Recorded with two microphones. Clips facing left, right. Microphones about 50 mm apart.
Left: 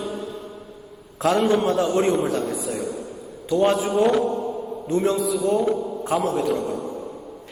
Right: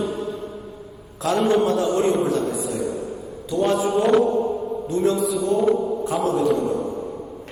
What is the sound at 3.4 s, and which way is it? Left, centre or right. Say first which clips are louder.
Speech: left 2 dB; left.